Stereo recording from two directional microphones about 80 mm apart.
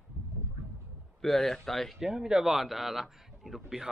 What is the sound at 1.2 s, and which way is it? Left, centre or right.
Speech, centre.